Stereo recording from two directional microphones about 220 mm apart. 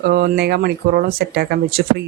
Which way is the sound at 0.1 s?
45° right (ahead or behind).